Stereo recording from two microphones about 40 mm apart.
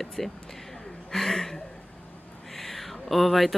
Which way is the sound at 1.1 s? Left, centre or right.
Centre.